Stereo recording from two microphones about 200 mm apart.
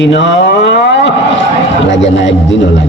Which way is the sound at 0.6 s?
65° left (ahead or behind).